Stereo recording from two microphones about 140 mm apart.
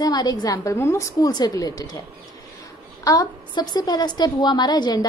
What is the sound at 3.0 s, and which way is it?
A woman's voice, 30° left (ahead or behind).